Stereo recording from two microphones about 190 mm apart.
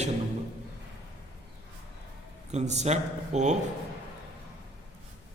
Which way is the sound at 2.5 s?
35° right (ahead or behind).